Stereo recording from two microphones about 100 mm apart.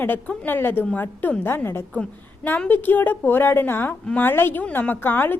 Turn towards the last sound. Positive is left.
turn(degrees=20)  # may be behind; listen again after turning